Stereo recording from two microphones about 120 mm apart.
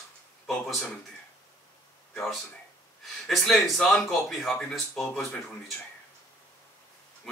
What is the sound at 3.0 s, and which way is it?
Speech, centre (ahead or behind).